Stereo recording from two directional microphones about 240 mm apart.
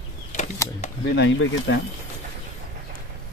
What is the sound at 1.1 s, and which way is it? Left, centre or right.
Speech, left.